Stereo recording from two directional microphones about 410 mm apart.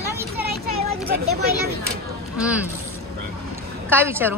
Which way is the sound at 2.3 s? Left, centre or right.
Centre.